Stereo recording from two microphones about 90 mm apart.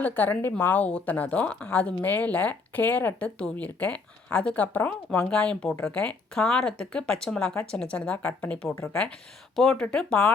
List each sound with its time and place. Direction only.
0.0 s a woman's voice: 20° left (ahead or behind)